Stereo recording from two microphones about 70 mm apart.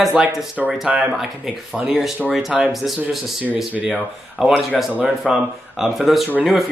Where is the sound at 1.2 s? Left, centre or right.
Centre.